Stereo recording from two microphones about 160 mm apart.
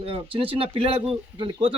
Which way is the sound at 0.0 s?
35° right (ahead or behind).